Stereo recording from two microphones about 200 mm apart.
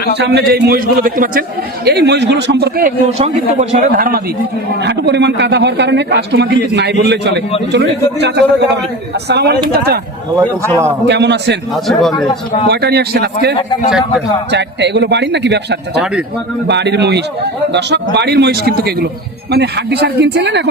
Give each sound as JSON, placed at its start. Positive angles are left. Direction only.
{"t": 0.2, "sound": "speech", "side_deg": -55}
{"t": 3.2, "sound": "a man's voice", "side_deg": -35}
{"t": 4.9, "sound": "speech", "side_deg": -60}
{"t": 10.3, "sound": "a man's voice", "side_deg": -15}
{"t": 11.0, "sound": "speech", "side_deg": -60}
{"t": 11.9, "sound": "speech", "side_deg": 0}
{"t": 12.6, "sound": "speech", "side_deg": -55}